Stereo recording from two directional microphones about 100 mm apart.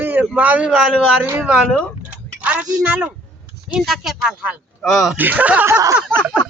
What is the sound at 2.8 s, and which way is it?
Speech, 10° right (ahead or behind).